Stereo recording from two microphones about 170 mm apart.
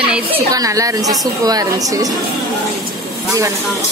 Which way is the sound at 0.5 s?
20° right (ahead or behind).